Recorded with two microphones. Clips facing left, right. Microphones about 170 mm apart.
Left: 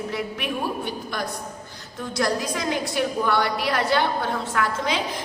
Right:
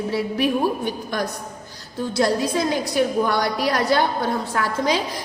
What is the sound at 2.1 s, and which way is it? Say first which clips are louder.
A woman's voice: right 4 dB; 30° right (ahead or behind).